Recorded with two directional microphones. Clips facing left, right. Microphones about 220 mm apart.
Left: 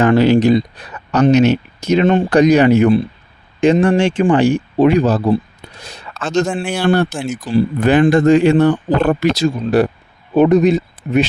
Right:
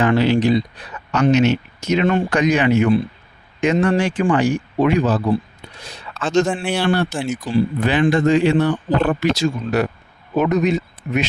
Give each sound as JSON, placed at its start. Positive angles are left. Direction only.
{"t": 0.0, "sound": "speech", "side_deg": 45}
{"t": 6.4, "sound": "a man's voice", "side_deg": 0}
{"t": 6.8, "sound": "speech", "side_deg": 50}